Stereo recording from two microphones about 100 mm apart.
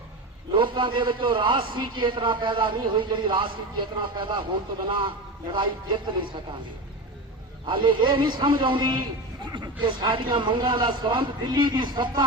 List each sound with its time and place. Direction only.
0.5 s a man's voice: 55° right (ahead or behind)
7.7 s a man's voice: 55° right (ahead or behind)